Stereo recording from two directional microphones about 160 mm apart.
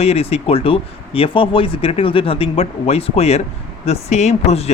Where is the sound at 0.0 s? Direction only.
40° left (ahead or behind).